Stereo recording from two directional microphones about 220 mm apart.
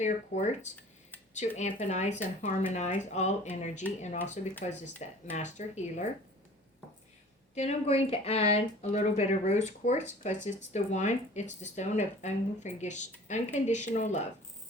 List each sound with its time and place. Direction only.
0.0 s speech: 30° left (ahead or behind)
7.5 s a woman's voice: 30° left (ahead or behind)